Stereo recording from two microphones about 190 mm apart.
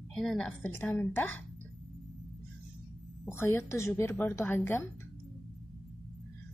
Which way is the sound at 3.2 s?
15° left (ahead or behind).